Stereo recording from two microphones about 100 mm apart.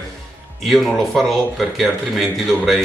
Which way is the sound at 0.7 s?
Centre (ahead or behind).